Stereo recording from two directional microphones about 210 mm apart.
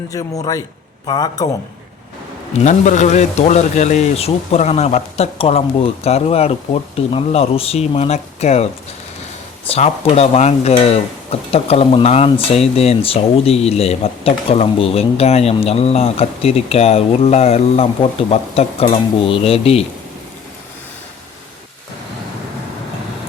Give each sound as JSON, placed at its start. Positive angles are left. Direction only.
{"t": 0.1, "sound": "speech", "side_deg": 15}
{"t": 2.6, "sound": "speech", "side_deg": 35}
{"t": 9.6, "sound": "speech", "side_deg": 30}